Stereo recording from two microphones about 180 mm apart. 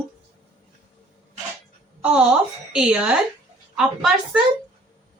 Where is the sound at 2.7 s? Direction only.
5° right (ahead or behind).